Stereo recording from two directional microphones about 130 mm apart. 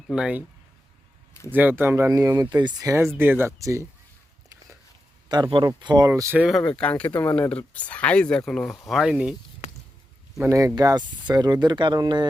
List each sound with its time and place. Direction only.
0.1 s speech: 5° right (ahead or behind)
1.5 s speech: 15° right (ahead or behind)
2.6 s speech: 35° right (ahead or behind)
3.2 s speech: 15° right (ahead or behind)
5.3 s speech: 35° right (ahead or behind)
6.3 s speech: 5° right (ahead or behind)
6.6 s speech: 5° left (ahead or behind)
10.8 s speech: 30° right (ahead or behind)